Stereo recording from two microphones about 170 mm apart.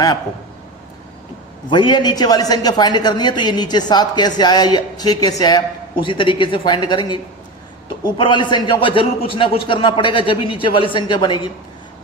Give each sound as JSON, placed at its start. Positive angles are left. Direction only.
{"t": 1.7, "sound": "a man's voice", "side_deg": 25}